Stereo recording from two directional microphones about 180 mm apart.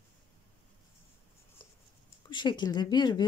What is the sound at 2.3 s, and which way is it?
Speech, 25° left (ahead or behind).